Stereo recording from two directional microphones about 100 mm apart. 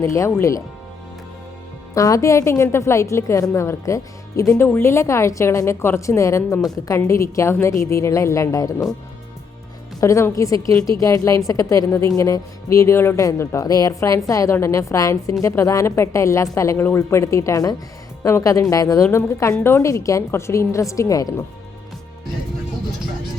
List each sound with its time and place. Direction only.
0.0 s a woman's voice: 30° left (ahead or behind)
2.0 s a woman's voice: 35° left (ahead or behind)
10.0 s a woman's voice: 35° left (ahead or behind)